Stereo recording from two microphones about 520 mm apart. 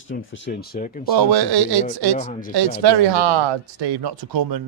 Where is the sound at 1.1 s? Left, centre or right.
Right.